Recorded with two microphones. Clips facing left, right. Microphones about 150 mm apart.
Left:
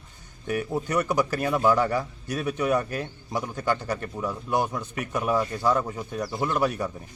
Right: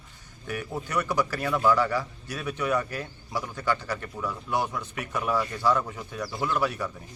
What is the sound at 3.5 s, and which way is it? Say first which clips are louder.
Speech: left 2 dB; 45° left (ahead or behind).